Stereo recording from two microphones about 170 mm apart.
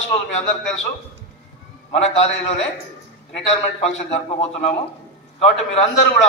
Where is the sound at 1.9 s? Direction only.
35° left (ahead or behind).